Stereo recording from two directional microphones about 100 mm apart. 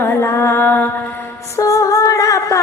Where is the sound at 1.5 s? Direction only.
30° left (ahead or behind).